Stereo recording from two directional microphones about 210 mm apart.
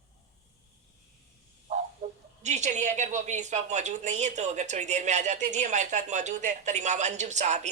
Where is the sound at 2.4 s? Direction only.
35° right (ahead or behind).